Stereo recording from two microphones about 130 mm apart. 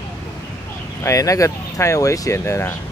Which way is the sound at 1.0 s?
25° left (ahead or behind).